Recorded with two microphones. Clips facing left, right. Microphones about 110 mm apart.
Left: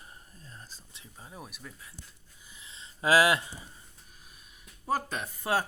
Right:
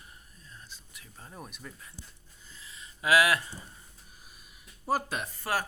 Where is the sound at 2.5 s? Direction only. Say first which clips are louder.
Right 1 dB; 20° left (ahead or behind).